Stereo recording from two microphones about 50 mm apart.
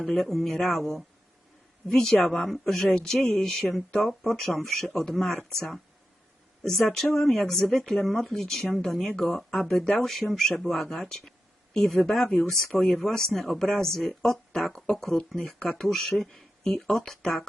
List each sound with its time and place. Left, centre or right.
0.0 s speech: centre
15.4 s speech: centre
15.9 s speech: centre